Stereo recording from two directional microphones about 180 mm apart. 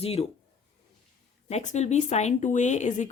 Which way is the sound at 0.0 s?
35° left (ahead or behind).